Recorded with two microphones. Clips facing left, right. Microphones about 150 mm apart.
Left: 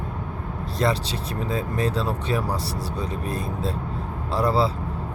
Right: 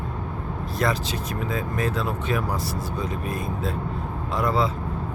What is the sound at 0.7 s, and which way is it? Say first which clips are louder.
Speech: left 1 dB; 30° left (ahead or behind).